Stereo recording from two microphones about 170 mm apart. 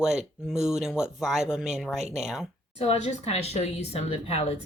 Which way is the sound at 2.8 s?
35° left (ahead or behind).